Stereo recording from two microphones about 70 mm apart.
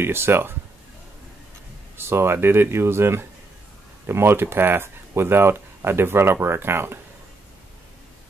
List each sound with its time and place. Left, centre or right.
0.0 s speech: right
2.0 s speech: right